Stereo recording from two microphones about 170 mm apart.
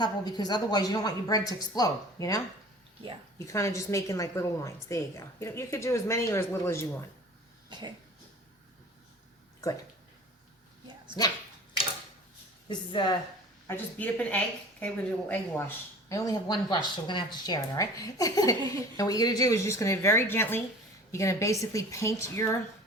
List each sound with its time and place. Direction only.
0.0 s a woman's voice: 25° left (ahead or behind)
7.7 s cough: 25° right (ahead or behind)
10.8 s dog: 25° right (ahead or behind)
12.6 s speech: 25° left (ahead or behind)
13.7 s a woman's voice: 10° left (ahead or behind)